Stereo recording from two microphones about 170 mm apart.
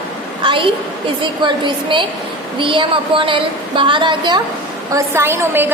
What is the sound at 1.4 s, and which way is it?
A woman's voice, 30° right (ahead or behind).